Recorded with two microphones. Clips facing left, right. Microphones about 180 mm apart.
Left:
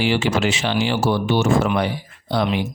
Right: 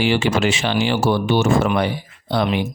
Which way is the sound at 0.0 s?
60° right (ahead or behind).